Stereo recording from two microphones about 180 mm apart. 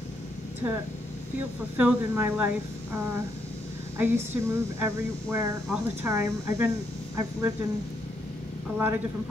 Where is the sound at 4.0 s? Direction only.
10° right (ahead or behind).